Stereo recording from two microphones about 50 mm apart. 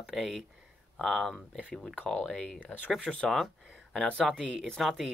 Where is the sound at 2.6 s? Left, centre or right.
Left.